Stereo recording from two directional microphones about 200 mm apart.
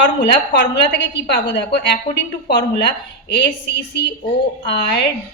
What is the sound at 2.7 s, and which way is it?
Speech, 55° left (ahead or behind).